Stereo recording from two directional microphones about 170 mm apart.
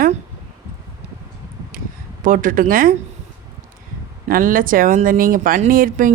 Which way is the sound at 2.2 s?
50° right (ahead or behind).